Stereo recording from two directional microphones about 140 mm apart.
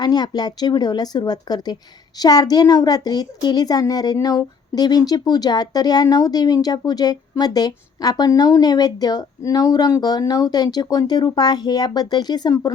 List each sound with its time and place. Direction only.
0.0 s a woman's voice: 30° left (ahead or behind)